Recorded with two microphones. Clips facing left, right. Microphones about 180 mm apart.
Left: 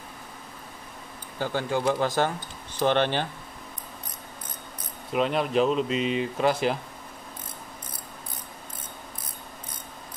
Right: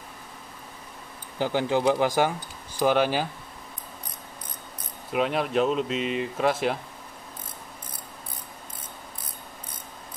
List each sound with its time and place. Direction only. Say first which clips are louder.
1.4 s speech: right 3 dB; 15° right (ahead or behind)
5.1 s speech: left 1 dB; centre (ahead or behind)